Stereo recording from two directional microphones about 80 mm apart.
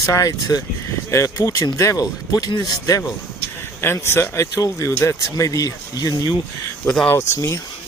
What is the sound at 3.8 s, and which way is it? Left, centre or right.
Speech, left.